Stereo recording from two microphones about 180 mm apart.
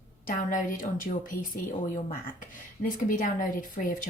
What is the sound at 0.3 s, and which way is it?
Speech, 45° left (ahead or behind).